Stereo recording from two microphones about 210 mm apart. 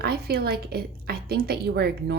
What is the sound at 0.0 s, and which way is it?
A woman's voice, 50° right (ahead or behind).